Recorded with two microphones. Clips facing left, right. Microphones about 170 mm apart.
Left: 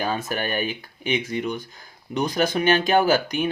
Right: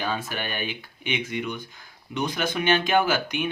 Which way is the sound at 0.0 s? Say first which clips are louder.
Left 4 dB; 45° left (ahead or behind).